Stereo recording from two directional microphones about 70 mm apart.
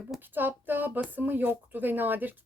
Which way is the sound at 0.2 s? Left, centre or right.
Right.